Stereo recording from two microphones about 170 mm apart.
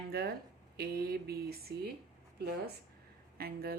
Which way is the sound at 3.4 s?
65° right (ahead or behind).